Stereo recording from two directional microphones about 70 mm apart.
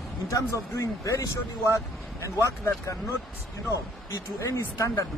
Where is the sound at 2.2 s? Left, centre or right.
Left.